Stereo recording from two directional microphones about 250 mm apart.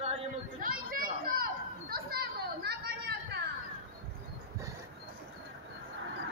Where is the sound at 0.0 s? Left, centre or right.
Right.